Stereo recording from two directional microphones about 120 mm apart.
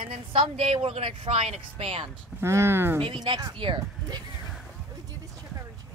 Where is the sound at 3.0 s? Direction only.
45° right (ahead or behind).